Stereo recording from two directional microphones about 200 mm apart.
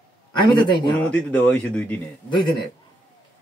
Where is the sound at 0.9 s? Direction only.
5° left (ahead or behind).